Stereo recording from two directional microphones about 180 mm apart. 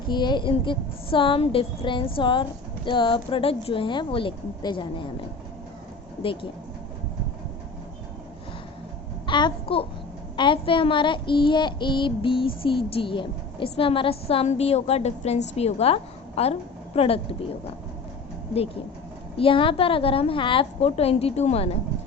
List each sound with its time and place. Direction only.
0.1 s a woman's voice: 25° left (ahead or behind)
6.2 s a woman's voice: 30° left (ahead or behind)
9.2 s a child's voice: 25° left (ahead or behind)
19.4 s a woman's voice: 30° left (ahead or behind)